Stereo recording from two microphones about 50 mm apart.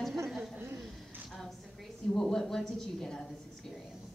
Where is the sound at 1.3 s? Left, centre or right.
Centre.